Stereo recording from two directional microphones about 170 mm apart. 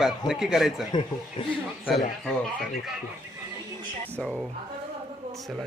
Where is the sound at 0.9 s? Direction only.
25° left (ahead or behind).